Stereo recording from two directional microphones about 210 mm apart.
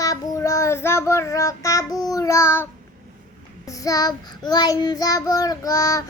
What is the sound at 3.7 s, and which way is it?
Child singing, 15° left (ahead or behind).